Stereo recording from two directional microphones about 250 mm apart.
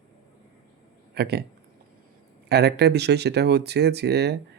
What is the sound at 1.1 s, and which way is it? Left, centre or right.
Speech, right.